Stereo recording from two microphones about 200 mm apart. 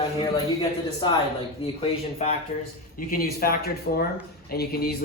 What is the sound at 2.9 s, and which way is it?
Speech, 45° left (ahead or behind).